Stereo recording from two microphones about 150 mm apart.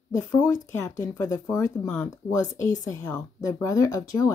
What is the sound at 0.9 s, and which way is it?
A woman's voice, 20° left (ahead or behind).